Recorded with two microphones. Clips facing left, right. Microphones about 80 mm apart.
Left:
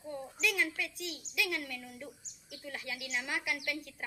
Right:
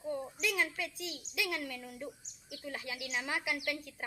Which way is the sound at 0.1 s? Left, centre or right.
Right.